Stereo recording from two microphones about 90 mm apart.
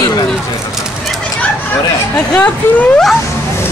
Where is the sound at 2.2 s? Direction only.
15° left (ahead or behind).